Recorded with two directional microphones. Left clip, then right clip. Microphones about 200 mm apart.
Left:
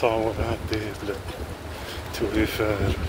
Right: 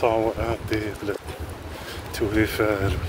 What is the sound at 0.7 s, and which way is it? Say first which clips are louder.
Speech: right 2 dB; 35° right (ahead or behind).